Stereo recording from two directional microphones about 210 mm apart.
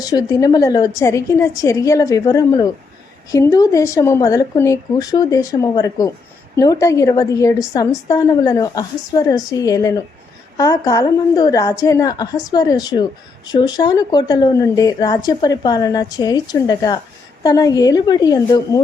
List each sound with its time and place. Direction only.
0.0 s a woman's voice: 20° left (ahead or behind)